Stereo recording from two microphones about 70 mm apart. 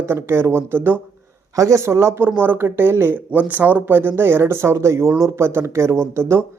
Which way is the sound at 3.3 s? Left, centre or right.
Right.